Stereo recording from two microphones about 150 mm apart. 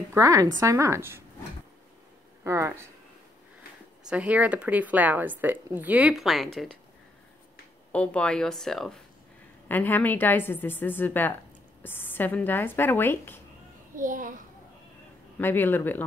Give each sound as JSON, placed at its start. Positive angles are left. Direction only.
{"t": 0.1, "sound": "a woman's voice", "side_deg": -20}
{"t": 2.4, "sound": "a woman's voice", "side_deg": -20}
{"t": 4.1, "sound": "speech", "side_deg": -10}
{"t": 7.9, "sound": "speech", "side_deg": 5}
{"t": 9.7, "sound": "a woman's voice", "side_deg": 10}
{"t": 13.9, "sound": "a child's voice", "side_deg": -65}
{"t": 15.3, "sound": "a woman's voice", "side_deg": 15}